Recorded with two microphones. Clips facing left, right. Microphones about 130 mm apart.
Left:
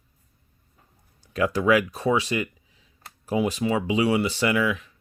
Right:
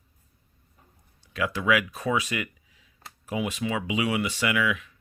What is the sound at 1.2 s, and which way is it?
Speech, 40° left (ahead or behind).